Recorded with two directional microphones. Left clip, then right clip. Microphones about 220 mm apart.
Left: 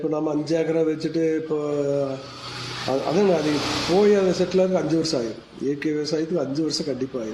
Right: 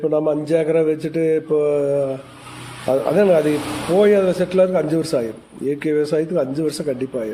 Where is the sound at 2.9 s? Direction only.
50° right (ahead or behind).